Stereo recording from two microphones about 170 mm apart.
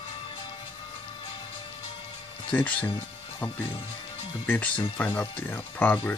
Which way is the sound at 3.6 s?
30° left (ahead or behind).